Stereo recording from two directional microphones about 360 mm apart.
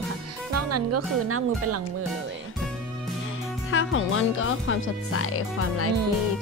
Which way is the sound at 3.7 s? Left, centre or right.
Left.